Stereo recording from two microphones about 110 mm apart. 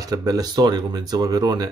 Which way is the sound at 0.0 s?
35° right (ahead or behind).